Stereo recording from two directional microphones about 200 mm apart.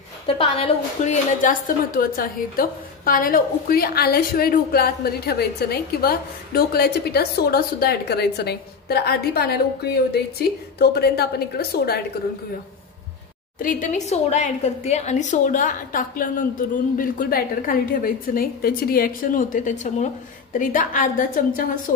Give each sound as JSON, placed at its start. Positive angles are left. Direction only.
{"t": 0.4, "sound": "a woman's voice", "side_deg": 30}
{"t": 13.6, "sound": "a woman's voice", "side_deg": 40}